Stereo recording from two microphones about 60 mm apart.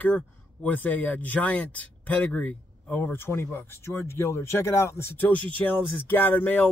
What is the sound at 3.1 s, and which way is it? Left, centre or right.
Speech, left.